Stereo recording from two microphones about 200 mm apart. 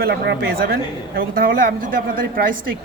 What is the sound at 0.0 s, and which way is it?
A man's voice, 50° right (ahead or behind).